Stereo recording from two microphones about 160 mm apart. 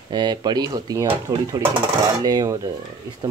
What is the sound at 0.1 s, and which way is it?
Speech, 25° right (ahead or behind).